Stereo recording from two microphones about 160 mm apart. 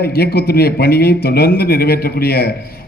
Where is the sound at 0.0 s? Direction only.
80° left.